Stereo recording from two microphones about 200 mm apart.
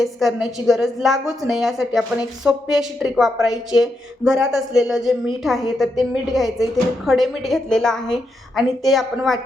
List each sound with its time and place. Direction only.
0.0 s a woman's voice: centre (ahead or behind)